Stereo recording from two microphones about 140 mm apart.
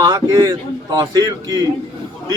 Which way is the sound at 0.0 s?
30° right (ahead or behind).